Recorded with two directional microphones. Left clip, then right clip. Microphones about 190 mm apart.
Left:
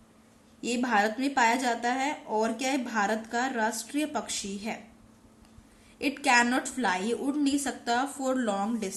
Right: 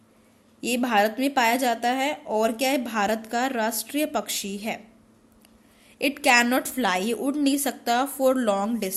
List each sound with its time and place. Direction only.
0.6 s a woman's voice: 45° right (ahead or behind)
6.0 s a woman's voice: 45° right (ahead or behind)